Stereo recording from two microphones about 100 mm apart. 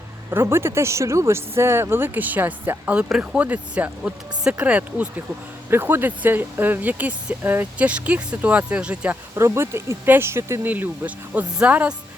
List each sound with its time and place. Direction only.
0.3 s speech: 25° right (ahead or behind)
9.3 s speech: 30° right (ahead or behind)